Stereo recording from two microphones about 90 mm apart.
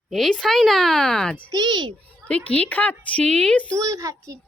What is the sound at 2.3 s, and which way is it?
A woman's voice, 15° left (ahead or behind).